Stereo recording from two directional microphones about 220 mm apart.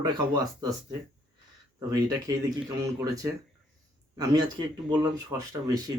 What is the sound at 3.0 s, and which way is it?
Speech, 15° right (ahead or behind).